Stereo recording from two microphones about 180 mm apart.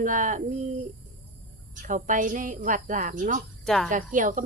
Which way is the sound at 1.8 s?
45° right (ahead or behind).